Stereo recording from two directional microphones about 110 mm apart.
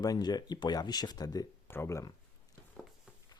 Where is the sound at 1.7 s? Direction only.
25° left (ahead or behind).